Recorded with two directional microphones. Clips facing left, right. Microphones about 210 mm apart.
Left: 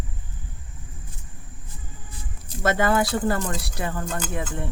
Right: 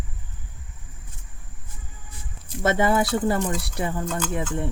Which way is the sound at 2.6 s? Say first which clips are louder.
Right 1 dB; 25° right (ahead or behind).